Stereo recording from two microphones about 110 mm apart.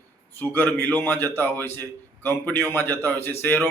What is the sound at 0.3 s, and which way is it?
A man's voice, 20° left (ahead or behind).